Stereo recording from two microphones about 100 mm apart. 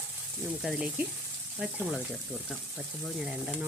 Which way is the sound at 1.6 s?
10° right (ahead or behind).